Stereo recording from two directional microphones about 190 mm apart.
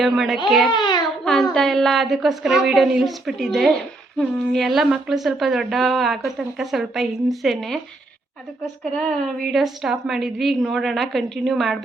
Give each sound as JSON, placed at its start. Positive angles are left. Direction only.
{"t": 0.0, "sound": "speech", "side_deg": 0}
{"t": 0.7, "sound": "a child's voice", "side_deg": 25}
{"t": 1.2, "sound": "a sound", "side_deg": 0}
{"t": 1.5, "sound": "speech", "side_deg": 0}
{"t": 9.0, "sound": "speech", "side_deg": 0}